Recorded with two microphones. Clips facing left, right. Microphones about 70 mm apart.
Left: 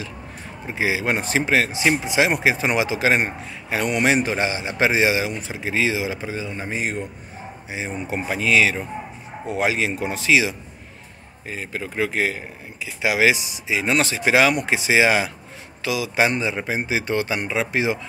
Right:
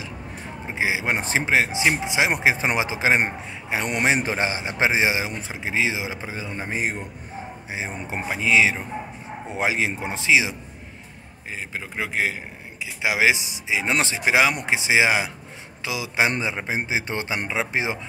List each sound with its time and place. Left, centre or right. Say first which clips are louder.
0.7 s a man's voice: left 2 dB; centre
11.5 s a man's voice: left 4 dB; centre